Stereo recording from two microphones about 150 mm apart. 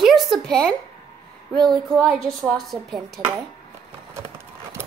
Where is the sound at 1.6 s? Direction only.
30° right (ahead or behind).